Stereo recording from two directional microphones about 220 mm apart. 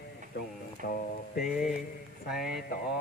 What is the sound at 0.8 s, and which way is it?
Music, 45° left (ahead or behind).